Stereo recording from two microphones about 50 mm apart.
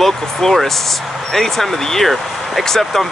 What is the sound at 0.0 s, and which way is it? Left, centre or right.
Speech, centre.